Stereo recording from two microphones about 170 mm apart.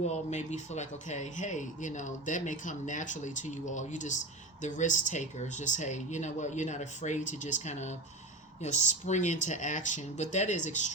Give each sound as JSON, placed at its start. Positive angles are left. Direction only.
{"t": 0.1, "sound": "speech", "side_deg": 45}